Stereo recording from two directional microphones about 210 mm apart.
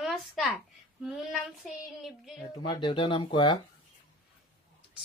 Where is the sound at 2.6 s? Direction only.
25° left (ahead or behind).